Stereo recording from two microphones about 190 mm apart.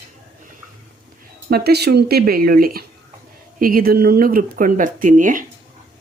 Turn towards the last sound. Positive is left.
turn(degrees=-45)  # may be behind; listen again after turning